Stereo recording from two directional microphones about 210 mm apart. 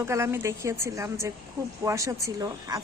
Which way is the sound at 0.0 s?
15° right (ahead or behind).